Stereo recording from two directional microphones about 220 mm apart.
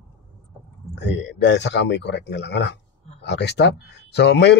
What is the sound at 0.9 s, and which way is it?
Speech, 55° left (ahead or behind).